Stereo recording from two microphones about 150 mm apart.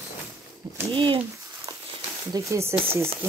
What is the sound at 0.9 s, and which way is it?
Speech, 35° right (ahead or behind).